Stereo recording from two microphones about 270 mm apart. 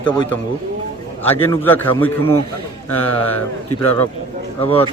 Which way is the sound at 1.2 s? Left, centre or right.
Centre.